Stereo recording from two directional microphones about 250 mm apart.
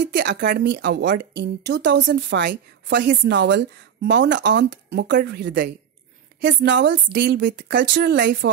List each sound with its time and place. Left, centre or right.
0.1 s a woman's voice: right